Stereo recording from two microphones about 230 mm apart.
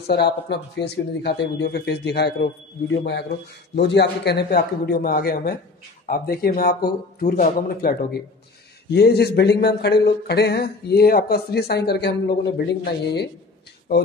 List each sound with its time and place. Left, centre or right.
0.0 s speech: left
3.7 s speech: left